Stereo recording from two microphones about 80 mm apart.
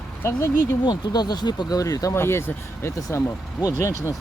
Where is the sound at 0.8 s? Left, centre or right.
Left.